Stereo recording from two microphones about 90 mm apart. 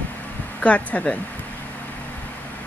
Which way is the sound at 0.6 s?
15° left (ahead or behind).